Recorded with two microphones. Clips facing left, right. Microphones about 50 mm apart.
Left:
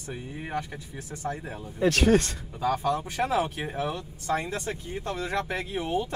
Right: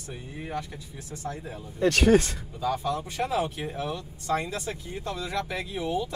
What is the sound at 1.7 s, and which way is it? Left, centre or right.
Speech, centre.